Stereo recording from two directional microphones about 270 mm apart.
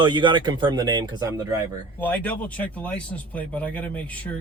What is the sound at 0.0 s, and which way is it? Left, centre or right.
Speech, centre.